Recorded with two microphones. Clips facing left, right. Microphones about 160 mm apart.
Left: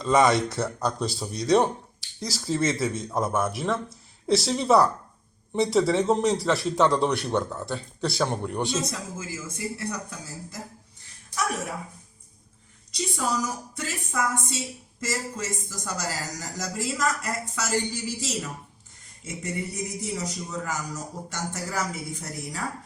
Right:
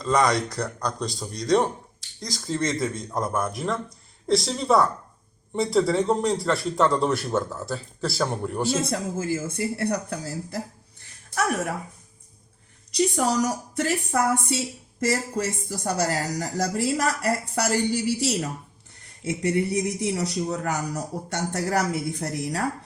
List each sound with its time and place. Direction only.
0.0 s speech: centre (ahead or behind)
8.7 s speech: 60° right (ahead or behind)
13.0 s a man's voice: 70° right (ahead or behind)